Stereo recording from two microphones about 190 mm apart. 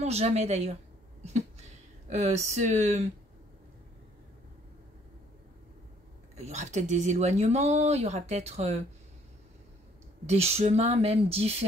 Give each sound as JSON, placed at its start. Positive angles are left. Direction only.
{"t": 0.0, "sound": "speech", "side_deg": -35}
{"t": 1.2, "sound": "a sound", "side_deg": -35}
{"t": 6.3, "sound": "speech", "side_deg": -35}
{"t": 10.2, "sound": "speech", "side_deg": -35}